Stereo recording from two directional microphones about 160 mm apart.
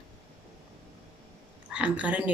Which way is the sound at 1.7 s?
10° right (ahead or behind).